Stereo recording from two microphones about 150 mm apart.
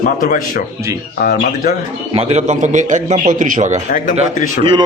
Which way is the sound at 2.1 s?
50° right (ahead or behind).